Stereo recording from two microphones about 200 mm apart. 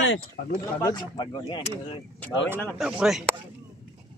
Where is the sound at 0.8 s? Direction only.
20° left (ahead or behind).